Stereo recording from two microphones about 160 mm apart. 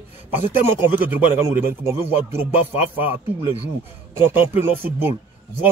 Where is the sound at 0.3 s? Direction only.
10° right (ahead or behind).